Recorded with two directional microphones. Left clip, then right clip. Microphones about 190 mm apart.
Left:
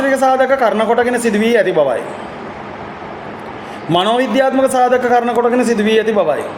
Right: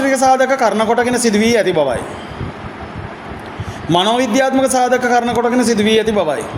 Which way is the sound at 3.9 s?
40° right (ahead or behind).